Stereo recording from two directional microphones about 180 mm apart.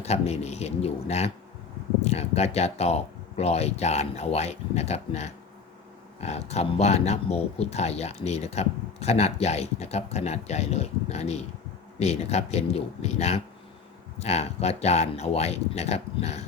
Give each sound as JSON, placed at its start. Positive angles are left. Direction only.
{"t": 0.0, "sound": "speech", "side_deg": 35}